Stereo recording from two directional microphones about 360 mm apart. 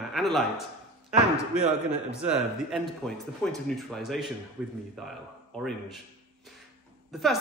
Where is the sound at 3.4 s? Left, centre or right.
Centre.